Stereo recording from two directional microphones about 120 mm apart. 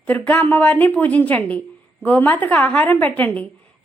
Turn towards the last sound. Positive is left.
turn(degrees=10)  # may be behind; listen again after turning